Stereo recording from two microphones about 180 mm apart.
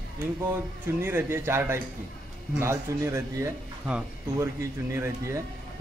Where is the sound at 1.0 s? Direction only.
15° right (ahead or behind).